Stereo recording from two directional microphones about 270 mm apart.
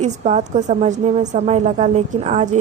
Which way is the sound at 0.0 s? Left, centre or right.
Right.